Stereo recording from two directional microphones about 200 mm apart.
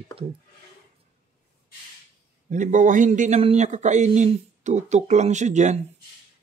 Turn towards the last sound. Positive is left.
turn(degrees=-35)  # may be behind; listen again after turning